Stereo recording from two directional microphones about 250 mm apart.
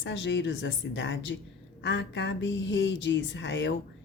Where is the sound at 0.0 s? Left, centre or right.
Left.